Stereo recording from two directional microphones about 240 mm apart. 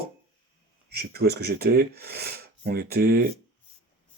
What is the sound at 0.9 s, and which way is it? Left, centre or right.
Speech, right.